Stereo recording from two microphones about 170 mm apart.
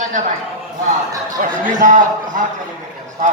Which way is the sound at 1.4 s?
50° right (ahead or behind).